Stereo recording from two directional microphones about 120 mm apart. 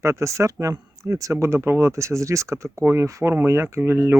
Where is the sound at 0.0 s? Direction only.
25° right (ahead or behind).